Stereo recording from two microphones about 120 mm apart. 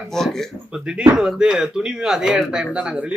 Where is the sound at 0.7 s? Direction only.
5° right (ahead or behind).